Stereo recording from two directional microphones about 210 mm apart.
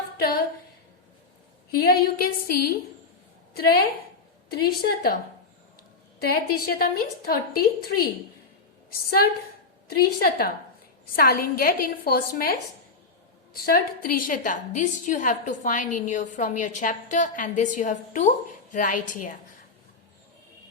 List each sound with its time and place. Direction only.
0.2 s a woman's voice: 45° left (ahead or behind)
1.7 s a woman's voice: 45° left (ahead or behind)
6.1 s a woman's voice: 45° left (ahead or behind)
8.9 s a woman's voice: 45° left (ahead or behind)